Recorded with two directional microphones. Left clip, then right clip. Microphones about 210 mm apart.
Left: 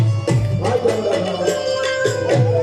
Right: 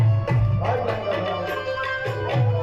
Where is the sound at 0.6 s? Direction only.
35° left (ahead or behind).